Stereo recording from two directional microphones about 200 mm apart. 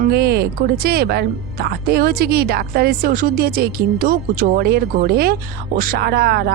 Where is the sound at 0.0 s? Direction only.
50° right (ahead or behind).